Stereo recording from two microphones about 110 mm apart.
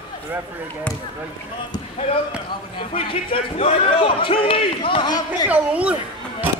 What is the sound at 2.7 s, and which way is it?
Speech, 55° left (ahead or behind).